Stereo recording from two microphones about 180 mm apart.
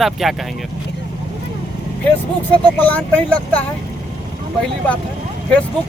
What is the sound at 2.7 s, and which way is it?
Speech, 10° left (ahead or behind).